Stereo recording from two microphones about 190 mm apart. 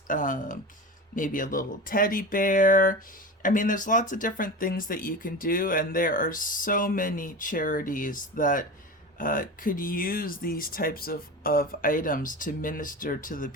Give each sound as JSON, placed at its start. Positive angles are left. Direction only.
{"t": 0.1, "sound": "speech", "side_deg": 45}